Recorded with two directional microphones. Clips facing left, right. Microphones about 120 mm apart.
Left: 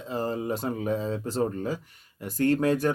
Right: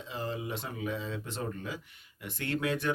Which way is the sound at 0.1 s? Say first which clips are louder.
Left 8 dB; 40° left (ahead or behind).